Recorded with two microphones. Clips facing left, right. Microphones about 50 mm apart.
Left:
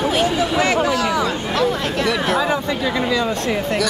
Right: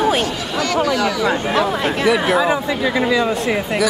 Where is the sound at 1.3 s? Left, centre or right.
Right.